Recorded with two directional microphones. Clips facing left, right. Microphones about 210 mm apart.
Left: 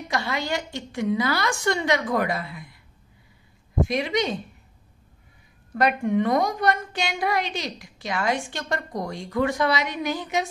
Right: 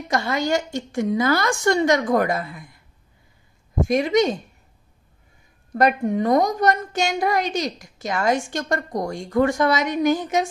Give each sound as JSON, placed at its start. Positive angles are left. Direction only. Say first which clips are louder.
{"t": 0.1, "sound": "a woman's voice", "louder": "right 6 dB", "side_deg": -45}
{"t": 3.8, "sound": "a woman's voice", "louder": "right 6 dB", "side_deg": -45}
{"t": 5.7, "sound": "a woman's voice", "louder": "right 3 dB", "side_deg": -40}